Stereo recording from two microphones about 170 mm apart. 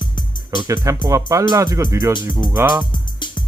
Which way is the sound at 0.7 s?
15° right (ahead or behind).